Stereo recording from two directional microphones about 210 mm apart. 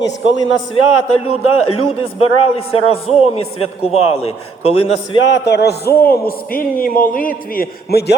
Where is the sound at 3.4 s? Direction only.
90° left.